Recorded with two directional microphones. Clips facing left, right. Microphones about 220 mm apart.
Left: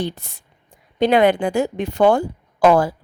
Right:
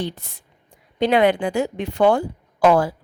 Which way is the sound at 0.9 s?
45° left (ahead or behind).